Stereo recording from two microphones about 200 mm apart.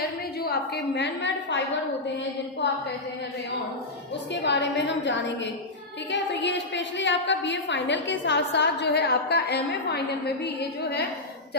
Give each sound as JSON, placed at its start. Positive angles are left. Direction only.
{"t": 0.4, "sound": "a woman's voice", "side_deg": 55}
{"t": 4.3, "sound": "a woman's voice", "side_deg": 60}